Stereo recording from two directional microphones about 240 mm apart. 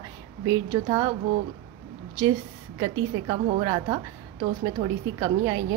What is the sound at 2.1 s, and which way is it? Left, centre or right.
A woman's voice, centre.